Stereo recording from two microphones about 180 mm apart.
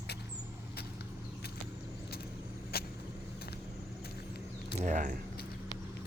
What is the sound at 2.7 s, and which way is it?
Vehicle, 60° left (ahead or behind).